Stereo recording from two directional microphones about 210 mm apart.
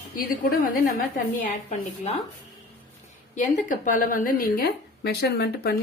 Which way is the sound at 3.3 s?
40° left (ahead or behind).